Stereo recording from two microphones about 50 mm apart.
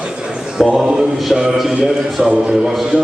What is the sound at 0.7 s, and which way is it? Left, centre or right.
Speech, centre.